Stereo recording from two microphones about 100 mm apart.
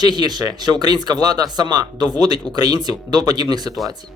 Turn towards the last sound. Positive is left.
turn(degrees=-45)  # may be behind; listen again after turning